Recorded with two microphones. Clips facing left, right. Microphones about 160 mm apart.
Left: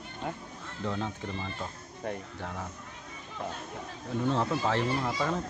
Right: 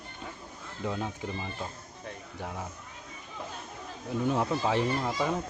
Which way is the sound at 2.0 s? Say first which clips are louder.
Left 8 dB; 65° left (ahead or behind).